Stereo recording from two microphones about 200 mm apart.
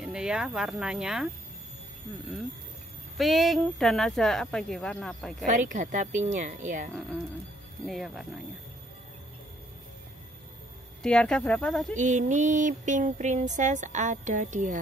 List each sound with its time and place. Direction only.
0.0 s speech: 5° right (ahead or behind)
3.2 s speech: centre (ahead or behind)
5.5 s a sound: 40° right (ahead or behind)
7.8 s speech: centre (ahead or behind)
11.0 s speech: 5° left (ahead or behind)
11.9 s a sound: 40° right (ahead or behind)